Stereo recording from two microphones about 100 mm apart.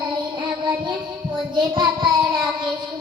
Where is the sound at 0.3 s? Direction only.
50° right (ahead or behind).